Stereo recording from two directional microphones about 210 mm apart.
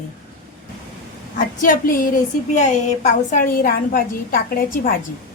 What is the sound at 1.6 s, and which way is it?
A woman's voice, 40° left (ahead or behind).